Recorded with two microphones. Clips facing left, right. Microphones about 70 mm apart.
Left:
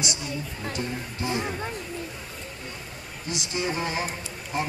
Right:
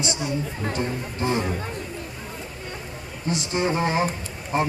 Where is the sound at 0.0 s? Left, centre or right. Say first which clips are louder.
Right 5 dB; right.